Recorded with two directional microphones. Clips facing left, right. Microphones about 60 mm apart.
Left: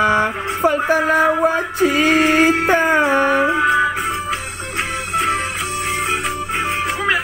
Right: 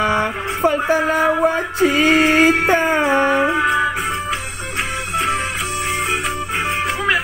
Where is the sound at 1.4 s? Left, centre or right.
Centre.